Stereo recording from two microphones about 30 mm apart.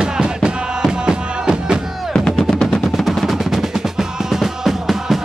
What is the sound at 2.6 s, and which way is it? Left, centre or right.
Music, centre.